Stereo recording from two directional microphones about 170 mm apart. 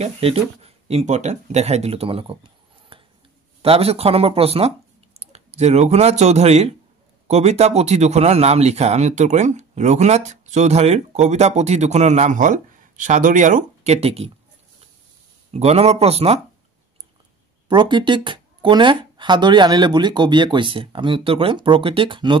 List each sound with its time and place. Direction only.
0.0 s speech: 35° right (ahead or behind)
15.5 s speech: 40° right (ahead or behind)
17.6 s speech: 25° right (ahead or behind)